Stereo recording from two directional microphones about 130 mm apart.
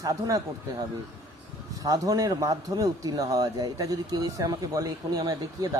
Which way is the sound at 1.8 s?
30° right (ahead or behind).